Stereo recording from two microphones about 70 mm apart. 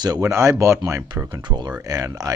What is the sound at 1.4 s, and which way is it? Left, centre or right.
Speech, right.